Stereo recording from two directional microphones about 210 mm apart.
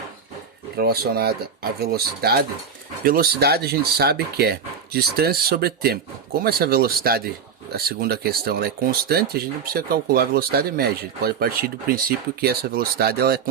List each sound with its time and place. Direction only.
0.8 s speech: 45° right (ahead or behind)